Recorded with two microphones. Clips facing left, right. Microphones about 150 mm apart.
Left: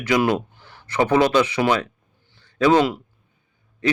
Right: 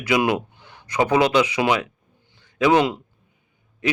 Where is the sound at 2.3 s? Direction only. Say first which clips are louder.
Left 1 dB; 15° right (ahead or behind).